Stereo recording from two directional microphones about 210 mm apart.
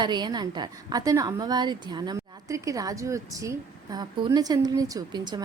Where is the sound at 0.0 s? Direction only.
20° right (ahead or behind).